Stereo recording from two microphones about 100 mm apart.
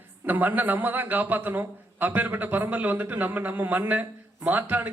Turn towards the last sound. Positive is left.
turn(degrees=-15)  # may be behind; listen again after turning